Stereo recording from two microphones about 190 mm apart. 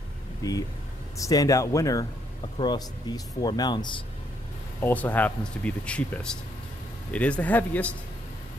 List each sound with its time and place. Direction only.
0.4 s speech: 20° left (ahead or behind)
4.8 s speech: 10° left (ahead or behind)